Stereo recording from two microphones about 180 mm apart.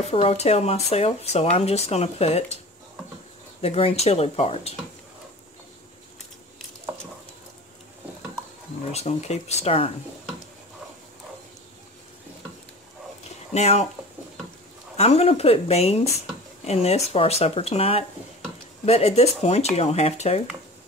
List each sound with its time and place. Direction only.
0.0 s speech: 35° left (ahead or behind)
3.6 s speech: 35° left (ahead or behind)
8.9 s speech: 35° left (ahead or behind)
13.5 s speech: 35° left (ahead or behind)
15.0 s speech: 35° left (ahead or behind)